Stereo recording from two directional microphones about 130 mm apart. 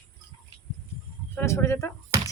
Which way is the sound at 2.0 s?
20° right (ahead or behind).